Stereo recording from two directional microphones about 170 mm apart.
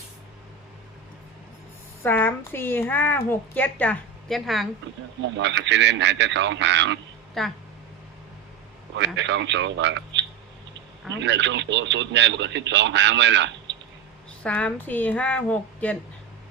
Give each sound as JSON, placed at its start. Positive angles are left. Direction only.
{"t": 2.0, "sound": "a woman's voice", "side_deg": 10}
{"t": 5.4, "sound": "speech", "side_deg": -90}
{"t": 7.4, "sound": "speech", "side_deg": 0}
{"t": 9.0, "sound": "speech", "side_deg": -90}
{"t": 14.4, "sound": "a woman's voice", "side_deg": 10}